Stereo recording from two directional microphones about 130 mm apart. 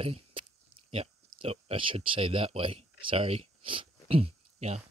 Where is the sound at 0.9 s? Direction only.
45° right (ahead or behind).